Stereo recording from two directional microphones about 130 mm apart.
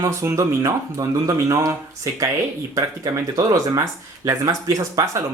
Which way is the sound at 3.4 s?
25° right (ahead or behind).